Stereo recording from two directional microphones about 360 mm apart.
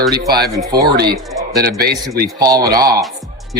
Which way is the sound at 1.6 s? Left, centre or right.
Right.